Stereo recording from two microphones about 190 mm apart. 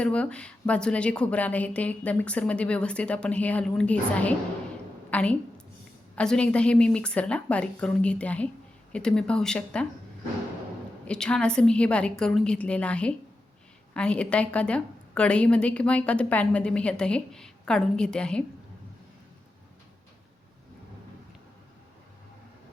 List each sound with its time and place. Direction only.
0.0 s a woman's voice: 5° left (ahead or behind)
11.0 s a woman's voice: 5° left (ahead or behind)